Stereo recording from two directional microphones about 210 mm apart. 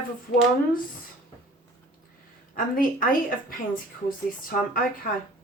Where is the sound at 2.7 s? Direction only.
40° left (ahead or behind).